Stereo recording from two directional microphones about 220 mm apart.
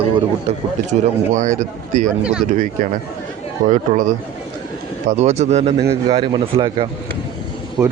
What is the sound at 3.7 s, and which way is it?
Speech, 35° right (ahead or behind).